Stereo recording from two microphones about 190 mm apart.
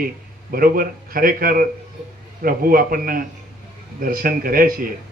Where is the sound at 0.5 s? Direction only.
50° right (ahead or behind).